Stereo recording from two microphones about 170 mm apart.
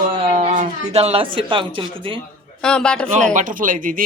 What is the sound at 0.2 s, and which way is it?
Speech, 45° right (ahead or behind).